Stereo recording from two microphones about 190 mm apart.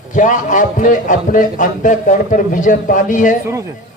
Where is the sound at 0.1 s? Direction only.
40° left (ahead or behind).